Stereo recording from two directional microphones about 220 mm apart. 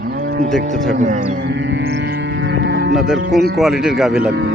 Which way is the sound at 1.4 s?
55° right (ahead or behind).